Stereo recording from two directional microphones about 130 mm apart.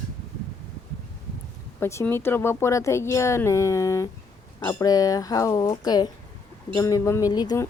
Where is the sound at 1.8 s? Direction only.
20° left (ahead or behind).